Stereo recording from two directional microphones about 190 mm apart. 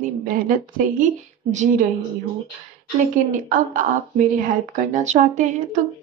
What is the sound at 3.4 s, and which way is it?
Speech, 45° right (ahead or behind).